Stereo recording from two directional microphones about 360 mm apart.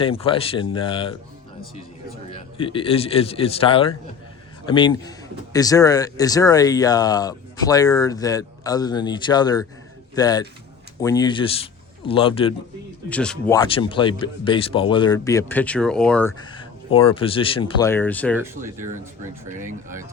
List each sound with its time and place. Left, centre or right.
0.0 s speech: centre
2.3 s speech: centre
13.1 s speech: centre
18.8 s speech: right